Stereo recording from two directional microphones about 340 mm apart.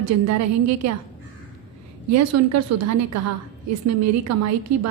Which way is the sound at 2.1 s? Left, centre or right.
Right.